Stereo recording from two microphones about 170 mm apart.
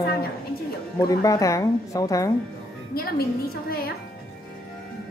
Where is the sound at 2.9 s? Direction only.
60° left (ahead or behind).